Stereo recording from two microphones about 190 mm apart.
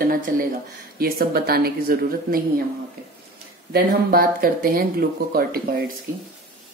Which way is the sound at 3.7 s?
50° right (ahead or behind).